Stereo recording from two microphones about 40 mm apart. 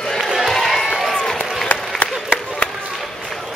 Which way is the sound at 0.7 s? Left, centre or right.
Centre.